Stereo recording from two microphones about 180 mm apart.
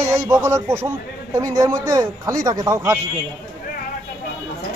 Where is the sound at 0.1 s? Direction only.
15° right (ahead or behind).